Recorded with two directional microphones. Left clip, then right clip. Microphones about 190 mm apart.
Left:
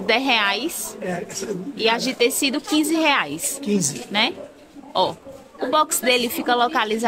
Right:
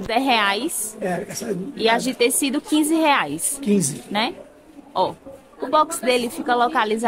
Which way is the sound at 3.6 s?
60° right (ahead or behind).